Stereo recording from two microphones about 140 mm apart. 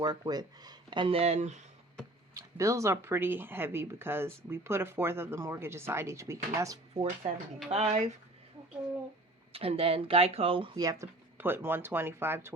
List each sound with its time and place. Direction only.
0.0 s speech: 30° right (ahead or behind); by 1.6 s 55° right (ahead or behind)
2.3 s speech: 20° right (ahead or behind)
6.9 s speech: 45° right (ahead or behind)
9.5 s speech: 45° right (ahead or behind)
10.8 s speech: 25° right (ahead or behind)